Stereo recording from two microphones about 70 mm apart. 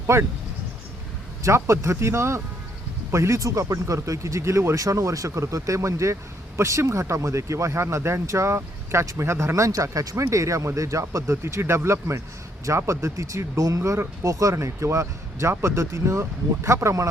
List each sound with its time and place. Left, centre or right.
1.5 s speech: right